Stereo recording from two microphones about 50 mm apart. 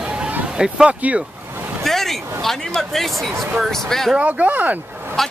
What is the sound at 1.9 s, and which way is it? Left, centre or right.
Speech, centre.